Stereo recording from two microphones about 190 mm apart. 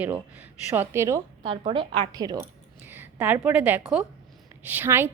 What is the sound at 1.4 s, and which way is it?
A woman's voice, 25° right (ahead or behind).